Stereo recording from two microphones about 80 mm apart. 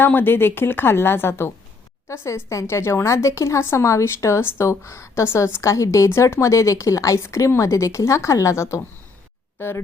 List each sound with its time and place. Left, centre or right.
0.0 s a woman's voice: left